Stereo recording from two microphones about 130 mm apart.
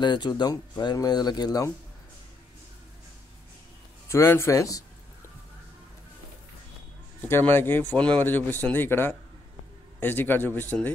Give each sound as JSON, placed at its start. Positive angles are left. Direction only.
{"t": 0.0, "sound": "speech", "side_deg": 35}
{"t": 4.1, "sound": "a sound", "side_deg": 20}
{"t": 7.2, "sound": "speech", "side_deg": 15}